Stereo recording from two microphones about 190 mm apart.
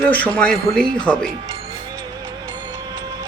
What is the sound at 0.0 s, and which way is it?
A man's voice, 5° left (ahead or behind).